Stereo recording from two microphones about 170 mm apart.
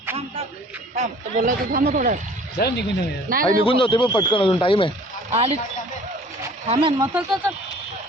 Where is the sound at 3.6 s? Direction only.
30° left (ahead or behind).